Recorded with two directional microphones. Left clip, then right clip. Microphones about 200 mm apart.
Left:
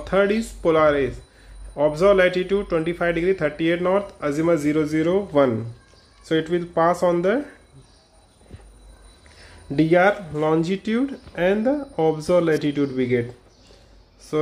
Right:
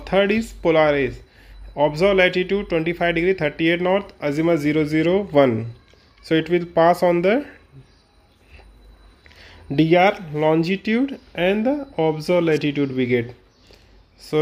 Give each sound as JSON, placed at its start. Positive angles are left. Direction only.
{"t": 0.0, "sound": "speech", "side_deg": -30}
{"t": 9.4, "sound": "speech", "side_deg": -35}